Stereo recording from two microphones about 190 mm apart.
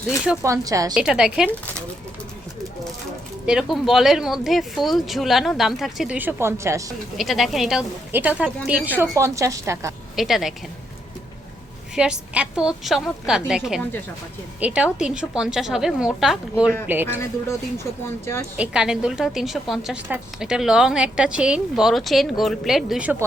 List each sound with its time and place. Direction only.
0.4 s a woman's voice: 15° right (ahead or behind)
0.9 s a woman's voice: 5° right (ahead or behind)
3.4 s a woman's voice: 5° right (ahead or behind)
7.2 s a woman's voice: centre (ahead or behind)
10.2 s a woman's voice: centre (ahead or behind)
11.9 s a woman's voice: 5° right (ahead or behind)
18.5 s a woman's voice: 5° right (ahead or behind)